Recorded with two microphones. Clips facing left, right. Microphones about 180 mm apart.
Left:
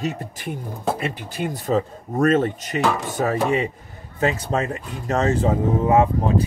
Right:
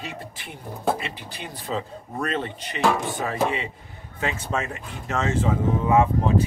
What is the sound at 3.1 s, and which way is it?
Speech, 45° left (ahead or behind).